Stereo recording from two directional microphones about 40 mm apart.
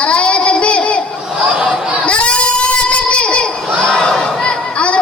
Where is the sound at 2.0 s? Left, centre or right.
Left.